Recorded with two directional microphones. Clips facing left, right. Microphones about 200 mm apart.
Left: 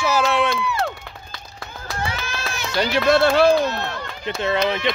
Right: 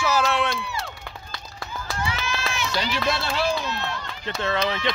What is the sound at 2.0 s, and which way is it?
Run, 55° left (ahead or behind).